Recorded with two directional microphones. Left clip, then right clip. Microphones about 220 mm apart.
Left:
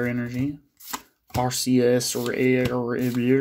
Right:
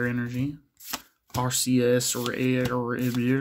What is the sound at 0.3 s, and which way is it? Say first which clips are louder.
Speech: left 3 dB; 20° right (ahead or behind).